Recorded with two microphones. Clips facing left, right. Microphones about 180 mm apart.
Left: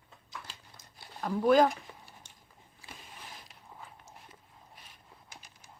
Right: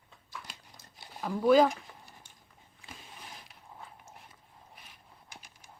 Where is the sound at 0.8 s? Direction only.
20° left (ahead or behind).